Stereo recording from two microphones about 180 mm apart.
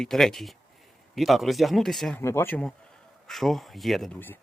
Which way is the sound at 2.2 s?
15° left (ahead or behind).